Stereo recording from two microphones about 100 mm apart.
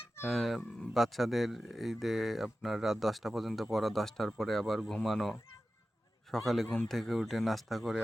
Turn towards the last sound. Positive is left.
turn(degrees=0)  # may be behind; listen again after turning